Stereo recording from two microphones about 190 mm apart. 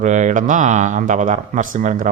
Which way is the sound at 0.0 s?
40° right (ahead or behind).